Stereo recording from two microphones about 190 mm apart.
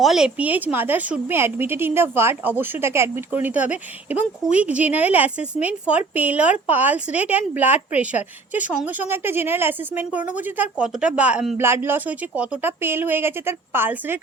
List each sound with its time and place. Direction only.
0.0 s a woman's voice: 5° right (ahead or behind)